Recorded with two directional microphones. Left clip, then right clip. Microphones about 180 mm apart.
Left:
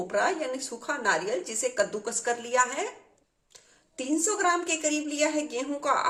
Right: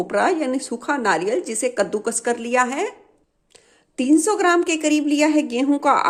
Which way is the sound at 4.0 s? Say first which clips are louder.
Right 10 dB; 55° right (ahead or behind).